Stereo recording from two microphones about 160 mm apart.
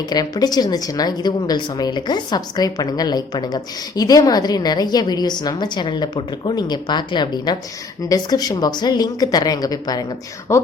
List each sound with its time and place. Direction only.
0.1 s a woman's voice: 25° left (ahead or behind)